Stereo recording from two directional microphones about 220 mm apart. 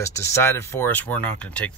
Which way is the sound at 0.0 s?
15° left (ahead or behind).